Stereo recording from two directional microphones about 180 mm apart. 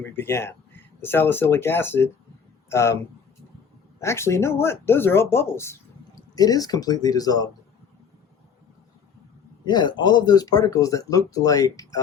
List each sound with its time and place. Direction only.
0.0 s speech: 15° left (ahead or behind)
4.0 s speech: 15° left (ahead or behind)
9.6 s speech: 25° left (ahead or behind)